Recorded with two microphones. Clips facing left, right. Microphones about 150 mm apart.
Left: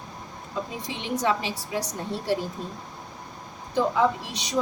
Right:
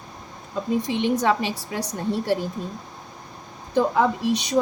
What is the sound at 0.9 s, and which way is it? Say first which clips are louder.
A woman's voice: right 3 dB; 60° right (ahead or behind).